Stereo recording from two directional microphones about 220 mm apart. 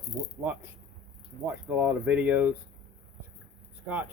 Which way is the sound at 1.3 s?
40° right (ahead or behind).